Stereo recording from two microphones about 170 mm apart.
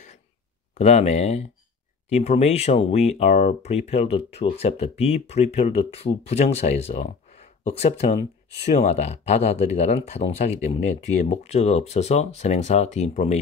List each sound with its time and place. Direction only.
0.7 s speech: 40° left (ahead or behind)